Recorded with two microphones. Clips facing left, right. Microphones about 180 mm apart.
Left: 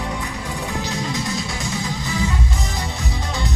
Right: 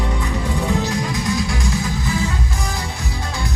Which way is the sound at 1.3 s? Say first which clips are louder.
Right 5 dB; 25° left (ahead or behind).